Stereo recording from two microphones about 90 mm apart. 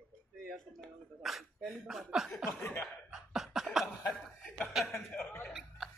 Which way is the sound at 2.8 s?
5° right (ahead or behind).